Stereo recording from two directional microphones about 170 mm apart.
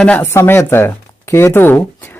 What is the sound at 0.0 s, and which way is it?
Speech, 10° left (ahead or behind).